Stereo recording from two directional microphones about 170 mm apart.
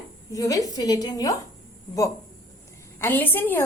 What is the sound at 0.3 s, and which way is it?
A woman's voice, 20° left (ahead or behind).